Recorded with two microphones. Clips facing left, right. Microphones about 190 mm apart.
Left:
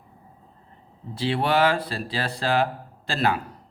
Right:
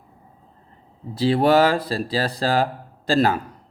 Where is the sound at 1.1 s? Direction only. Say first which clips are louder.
Right 6 dB; 40° right (ahead or behind).